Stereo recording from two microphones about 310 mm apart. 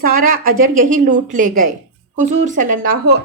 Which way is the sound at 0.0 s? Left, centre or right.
Right.